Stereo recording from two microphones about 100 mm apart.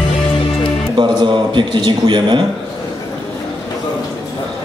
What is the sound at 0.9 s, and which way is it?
A man's voice, 50° right (ahead or behind).